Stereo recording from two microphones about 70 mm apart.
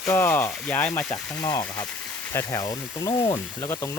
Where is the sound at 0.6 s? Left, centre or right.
Centre.